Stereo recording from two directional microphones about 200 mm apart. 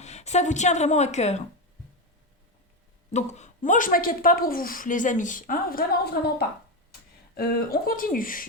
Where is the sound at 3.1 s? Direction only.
35° left (ahead or behind); by 6.3 s 50° left (ahead or behind).